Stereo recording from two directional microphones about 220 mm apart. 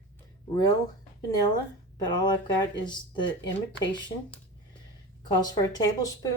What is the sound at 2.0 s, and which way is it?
Speech, 20° left (ahead or behind).